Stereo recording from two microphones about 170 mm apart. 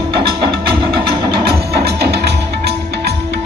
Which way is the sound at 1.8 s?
75° right (ahead or behind).